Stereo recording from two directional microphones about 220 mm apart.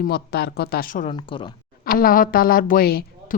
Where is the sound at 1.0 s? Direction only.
20° left (ahead or behind).